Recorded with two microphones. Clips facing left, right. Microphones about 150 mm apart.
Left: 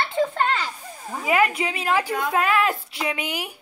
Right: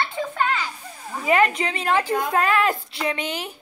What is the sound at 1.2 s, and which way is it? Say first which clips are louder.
Speech: right 2 dB; 5° left (ahead or behind).